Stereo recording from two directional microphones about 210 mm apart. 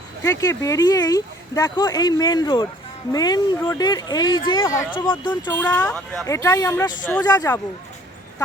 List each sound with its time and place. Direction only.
0.2 s speech: 15° left (ahead or behind)
5.5 s speech: 5° left (ahead or behind)